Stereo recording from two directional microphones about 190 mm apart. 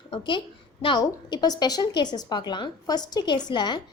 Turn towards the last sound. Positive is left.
turn(degrees=25)  # may be behind; listen again after turning